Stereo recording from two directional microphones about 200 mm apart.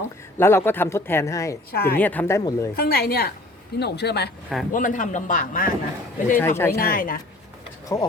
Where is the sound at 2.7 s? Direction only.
50° left (ahead or behind).